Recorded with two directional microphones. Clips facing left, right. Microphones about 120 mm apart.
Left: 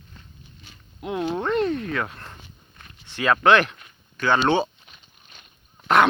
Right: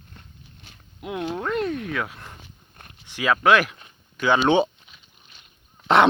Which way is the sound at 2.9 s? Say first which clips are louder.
Left 1 dB; 10° right (ahead or behind).